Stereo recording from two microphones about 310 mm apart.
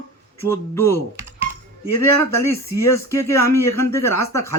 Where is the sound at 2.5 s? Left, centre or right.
Centre.